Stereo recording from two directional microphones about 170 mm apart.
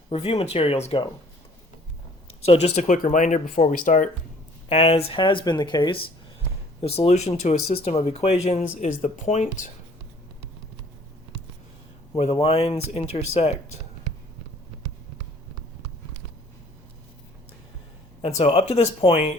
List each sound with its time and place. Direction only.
0.1 s speech: 35° left (ahead or behind)
2.5 s speech: 40° left (ahead or behind)
4.7 s speech: 35° left (ahead or behind)
6.8 s speech: 35° left (ahead or behind)
12.1 s speech: 35° left (ahead or behind)
18.2 s speech: 35° left (ahead or behind)